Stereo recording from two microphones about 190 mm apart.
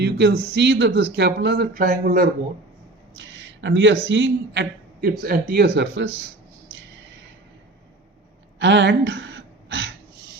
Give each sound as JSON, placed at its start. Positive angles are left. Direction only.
{"t": 0.0, "sound": "speech", "side_deg": -60}
{"t": 3.2, "sound": "a man's voice", "side_deg": -70}
{"t": 8.5, "sound": "gasp", "side_deg": -70}